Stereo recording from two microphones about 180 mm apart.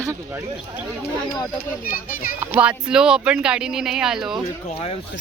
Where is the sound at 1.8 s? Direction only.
50° left (ahead or behind).